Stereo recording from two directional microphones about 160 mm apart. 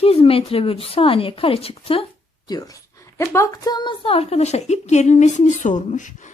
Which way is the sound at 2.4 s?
25° left (ahead or behind).